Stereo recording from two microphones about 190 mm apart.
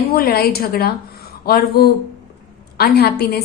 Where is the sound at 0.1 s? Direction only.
55° left (ahead or behind).